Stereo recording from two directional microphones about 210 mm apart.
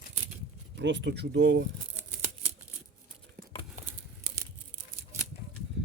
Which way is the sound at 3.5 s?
25° left (ahead or behind).